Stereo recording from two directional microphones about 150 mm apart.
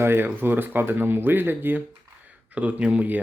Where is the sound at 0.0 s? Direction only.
15° right (ahead or behind).